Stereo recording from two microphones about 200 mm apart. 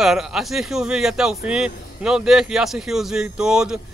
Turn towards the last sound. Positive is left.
turn(degrees=-5)  # may be behind; listen again after turning